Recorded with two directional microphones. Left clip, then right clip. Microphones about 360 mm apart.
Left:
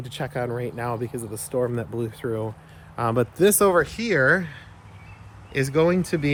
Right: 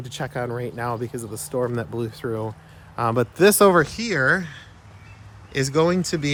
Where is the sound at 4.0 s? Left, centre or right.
Centre.